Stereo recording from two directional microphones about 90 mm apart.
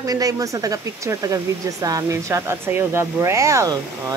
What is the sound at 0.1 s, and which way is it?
Speech, 40° right (ahead or behind).